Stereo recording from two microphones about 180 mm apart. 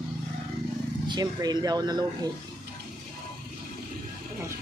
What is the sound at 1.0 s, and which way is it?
Speech, 25° right (ahead or behind).